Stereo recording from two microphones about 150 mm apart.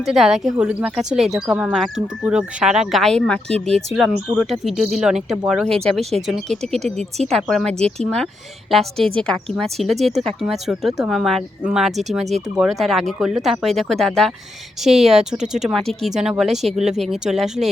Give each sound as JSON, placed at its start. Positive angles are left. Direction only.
{"t": 0.0, "sound": "a woman's voice", "side_deg": 0}
{"t": 6.9, "sound": "speech", "side_deg": -50}
{"t": 7.3, "sound": "a woman's voice", "side_deg": 0}